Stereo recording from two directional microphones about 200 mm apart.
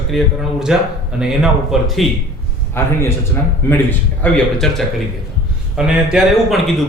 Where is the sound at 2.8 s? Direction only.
10° left (ahead or behind).